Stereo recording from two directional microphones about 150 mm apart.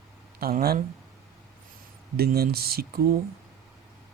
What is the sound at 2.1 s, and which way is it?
Speech, 90° right.